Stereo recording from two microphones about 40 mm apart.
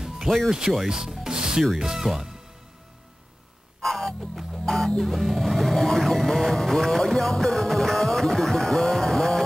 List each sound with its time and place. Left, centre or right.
0.0 s music: centre
0.8 s rub: centre
1.8 s speech: centre
3.8 s music: centre
4.6 s music: centre
6.5 s speech: centre
7.2 s music: centre